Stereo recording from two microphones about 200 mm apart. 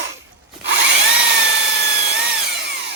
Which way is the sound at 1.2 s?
60° right (ahead or behind).